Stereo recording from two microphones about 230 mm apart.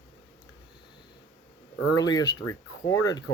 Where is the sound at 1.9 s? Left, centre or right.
Centre.